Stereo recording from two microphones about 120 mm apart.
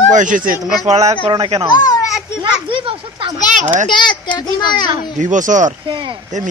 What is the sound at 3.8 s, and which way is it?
A child's voice, 40° left (ahead or behind).